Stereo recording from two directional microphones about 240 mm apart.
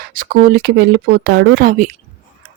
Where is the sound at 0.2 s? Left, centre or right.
Right.